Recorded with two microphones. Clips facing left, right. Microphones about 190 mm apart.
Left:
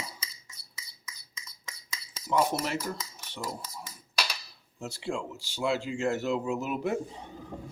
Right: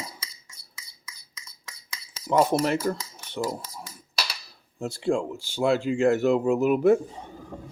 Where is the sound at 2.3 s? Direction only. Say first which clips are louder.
Right 6 dB; 55° right (ahead or behind).